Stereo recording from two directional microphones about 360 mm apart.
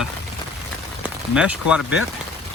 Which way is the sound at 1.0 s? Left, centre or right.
Centre.